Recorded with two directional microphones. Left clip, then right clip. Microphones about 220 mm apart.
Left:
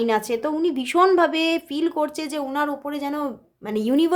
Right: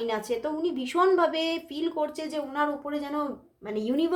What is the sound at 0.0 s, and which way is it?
Speech, 40° left (ahead or behind).